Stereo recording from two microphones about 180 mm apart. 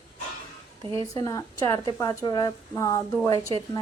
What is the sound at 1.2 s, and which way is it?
Speech, 15° left (ahead or behind).